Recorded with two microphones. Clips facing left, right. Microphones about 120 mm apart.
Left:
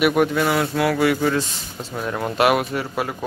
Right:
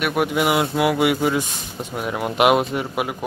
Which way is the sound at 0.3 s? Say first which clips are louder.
Right 1 dB; 15° right (ahead or behind).